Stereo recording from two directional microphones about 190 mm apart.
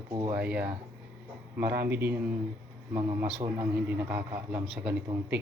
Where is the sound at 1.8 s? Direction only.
10° right (ahead or behind).